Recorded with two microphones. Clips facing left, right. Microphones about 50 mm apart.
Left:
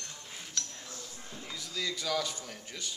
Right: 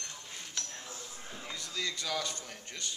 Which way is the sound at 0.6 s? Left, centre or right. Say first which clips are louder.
Left 2 dB; centre.